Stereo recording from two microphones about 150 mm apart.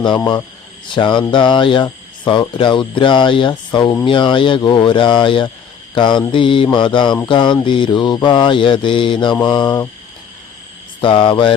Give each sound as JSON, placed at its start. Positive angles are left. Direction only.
{"t": 0.9, "sound": "speech", "side_deg": 30}
{"t": 9.4, "sound": "mantra", "side_deg": 30}
{"t": 11.0, "sound": "speech", "side_deg": 35}